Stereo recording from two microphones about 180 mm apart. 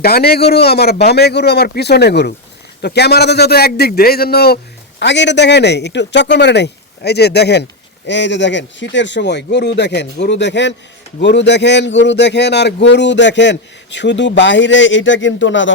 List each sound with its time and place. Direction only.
0.0 s a man's voice: 60° left (ahead or behind); by 15.7 s 90° left